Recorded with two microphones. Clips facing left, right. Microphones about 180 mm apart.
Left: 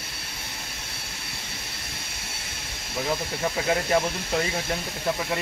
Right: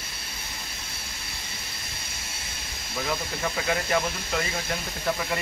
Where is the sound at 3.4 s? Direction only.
20° left (ahead or behind).